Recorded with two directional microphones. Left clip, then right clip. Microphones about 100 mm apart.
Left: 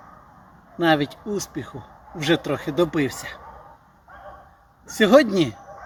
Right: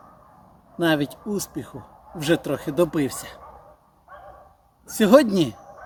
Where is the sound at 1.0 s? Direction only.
50° right (ahead or behind).